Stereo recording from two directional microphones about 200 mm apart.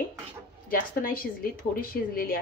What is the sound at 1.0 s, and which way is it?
Speech, 45° left (ahead or behind).